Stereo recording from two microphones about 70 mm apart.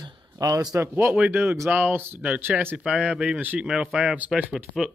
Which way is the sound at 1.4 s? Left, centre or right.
Right.